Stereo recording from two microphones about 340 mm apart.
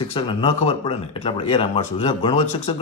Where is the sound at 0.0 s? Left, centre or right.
Centre.